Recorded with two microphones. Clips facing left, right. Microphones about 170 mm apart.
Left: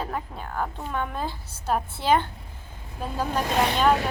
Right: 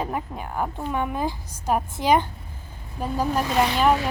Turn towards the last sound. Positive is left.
turn(degrees=-10)  # may be behind; listen again after turning